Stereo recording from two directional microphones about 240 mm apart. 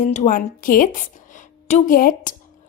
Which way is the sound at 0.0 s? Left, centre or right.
Left.